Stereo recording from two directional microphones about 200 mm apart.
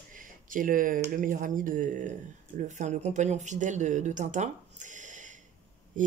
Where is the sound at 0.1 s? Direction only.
40° right (ahead or behind).